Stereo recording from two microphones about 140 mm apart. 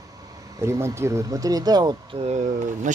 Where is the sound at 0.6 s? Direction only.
20° right (ahead or behind).